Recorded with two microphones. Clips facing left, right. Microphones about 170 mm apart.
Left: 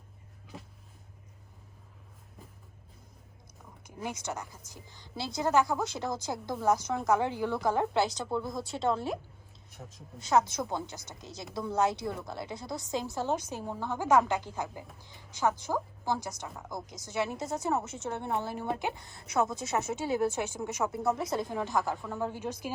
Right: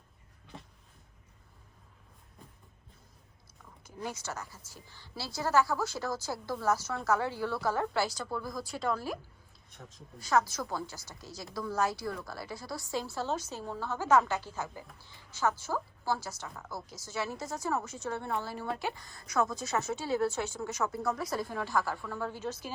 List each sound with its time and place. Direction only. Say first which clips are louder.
3.8 s a woman's voice: left 2 dB; 15° left (ahead or behind)
10.2 s a woman's voice: left 2 dB; 20° left (ahead or behind)